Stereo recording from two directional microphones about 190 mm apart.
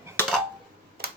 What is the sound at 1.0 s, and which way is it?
Tick-tock, 55° right (ahead or behind).